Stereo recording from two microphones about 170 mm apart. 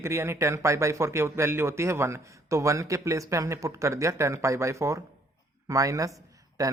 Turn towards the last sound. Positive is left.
turn(degrees=-20)  # may be behind; listen again after turning